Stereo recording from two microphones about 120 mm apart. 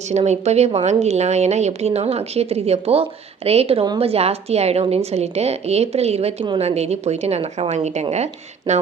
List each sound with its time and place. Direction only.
0.1 s a woman's voice: 65° right (ahead or behind)